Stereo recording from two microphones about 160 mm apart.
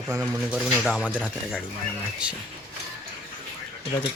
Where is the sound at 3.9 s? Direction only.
20° left (ahead or behind).